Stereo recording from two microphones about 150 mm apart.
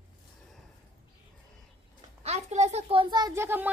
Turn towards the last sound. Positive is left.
turn(degrees=-15)  # may be behind; listen again after turning